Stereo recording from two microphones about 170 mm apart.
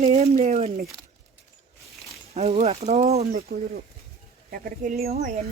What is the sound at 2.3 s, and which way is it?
Speech, 35° right (ahead or behind).